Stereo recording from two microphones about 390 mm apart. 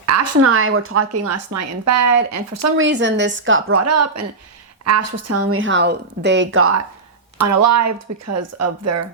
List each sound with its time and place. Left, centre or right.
0.0 s a woman's voice: right
2.8 s a woman's voice: right
7.3 s speech: right